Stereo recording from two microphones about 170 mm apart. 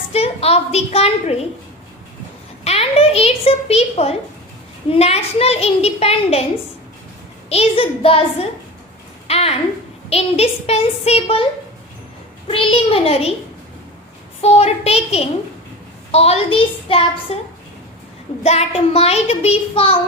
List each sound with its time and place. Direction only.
0.1 s child singing: 35° left (ahead or behind)
2.6 s a child's voice: 35° left (ahead or behind)
4.9 s child singing: 35° left (ahead or behind)
7.5 s child singing: 35° left (ahead or behind)
9.2 s a sound: 35° left (ahead or behind)
10.1 s child singing: 35° left (ahead or behind)
12.5 s child singing: 30° left (ahead or behind)
14.4 s child singing: 35° left (ahead or behind)
18.4 s child singing: 35° left (ahead or behind)